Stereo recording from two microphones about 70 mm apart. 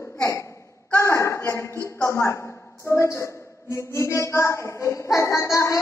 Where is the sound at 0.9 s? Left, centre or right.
Left.